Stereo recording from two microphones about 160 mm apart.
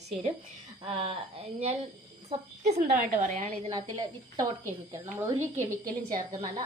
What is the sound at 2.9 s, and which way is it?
Speech, 55° right (ahead or behind).